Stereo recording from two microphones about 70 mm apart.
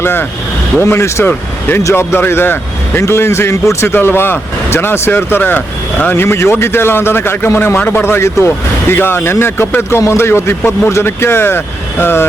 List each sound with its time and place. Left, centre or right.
0.0 s a man's voice: left
3.9 s speech: left
6.2 s speech: left